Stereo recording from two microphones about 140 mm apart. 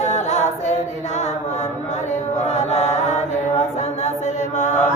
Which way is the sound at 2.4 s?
55° left (ahead or behind).